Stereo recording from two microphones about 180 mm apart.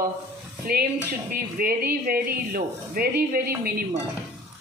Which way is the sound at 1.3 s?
55° right (ahead or behind).